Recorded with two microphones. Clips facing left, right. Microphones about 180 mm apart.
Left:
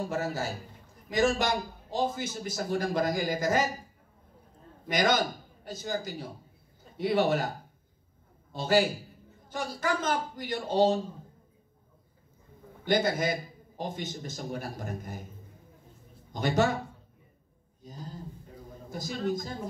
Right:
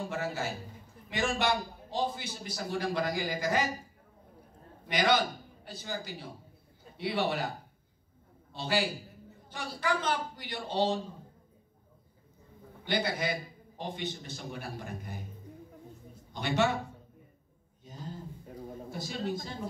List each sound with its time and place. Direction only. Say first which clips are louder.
0.0 s a man's voice: left 3 dB; 40° left (ahead or behind)
4.8 s a man's voice: left 1 dB; 45° left (ahead or behind)
8.5 s a man's voice: left 6 dB; 45° left (ahead or behind)
12.8 s a man's voice: left 5 dB; 45° left (ahead or behind)
16.3 s a man's voice: left 3 dB; 40° left (ahead or behind)
18.9 s a man's voice: left 4 dB; 40° left (ahead or behind)